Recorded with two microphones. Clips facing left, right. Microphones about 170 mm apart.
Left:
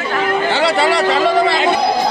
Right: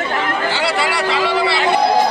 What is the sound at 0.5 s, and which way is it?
Speech, 30° left (ahead or behind).